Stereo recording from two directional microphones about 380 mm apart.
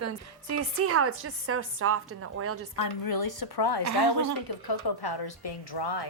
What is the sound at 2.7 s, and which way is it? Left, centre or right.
A woman's voice, left.